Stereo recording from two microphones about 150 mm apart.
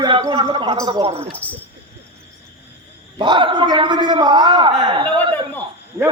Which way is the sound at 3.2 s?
30° right (ahead or behind).